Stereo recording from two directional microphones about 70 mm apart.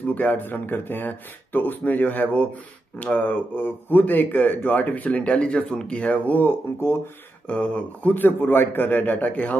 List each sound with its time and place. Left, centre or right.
0.0 s speech: left
7.4 s speech: centre